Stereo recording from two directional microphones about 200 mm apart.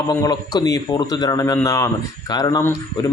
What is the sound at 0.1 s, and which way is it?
Speech, 20° left (ahead or behind).